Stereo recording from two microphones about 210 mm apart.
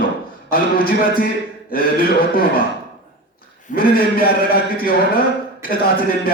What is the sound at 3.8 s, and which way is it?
Speech, 45° left (ahead or behind).